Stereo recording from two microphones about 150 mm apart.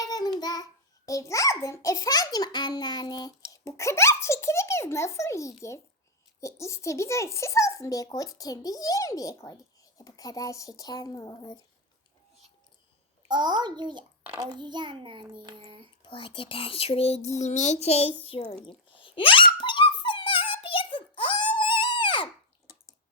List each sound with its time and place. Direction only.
0.0 s a child's voice: 25° left (ahead or behind)
13.2 s a child's voice: 30° right (ahead or behind)
16.0 s a child's voice: 35° left (ahead or behind)
18.3 s a sound: 40° left (ahead or behind)